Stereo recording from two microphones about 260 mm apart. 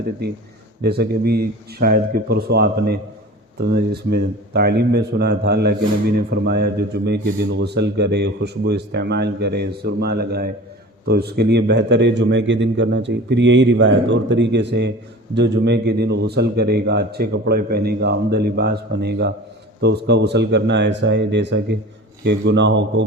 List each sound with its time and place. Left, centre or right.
0.8 s a man's voice: right